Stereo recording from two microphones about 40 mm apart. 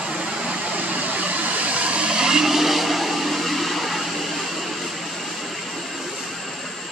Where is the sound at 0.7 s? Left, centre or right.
Right.